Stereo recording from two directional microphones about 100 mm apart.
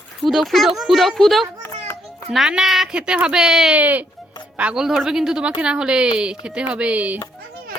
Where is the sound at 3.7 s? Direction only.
15° right (ahead or behind).